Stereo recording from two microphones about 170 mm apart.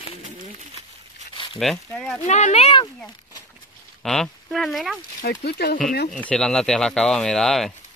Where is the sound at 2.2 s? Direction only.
45° left (ahead or behind).